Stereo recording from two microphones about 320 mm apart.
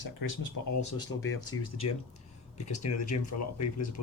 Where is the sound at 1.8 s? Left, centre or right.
Left.